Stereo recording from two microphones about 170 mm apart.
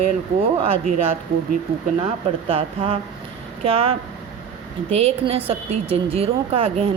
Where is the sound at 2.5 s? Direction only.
35° right (ahead or behind).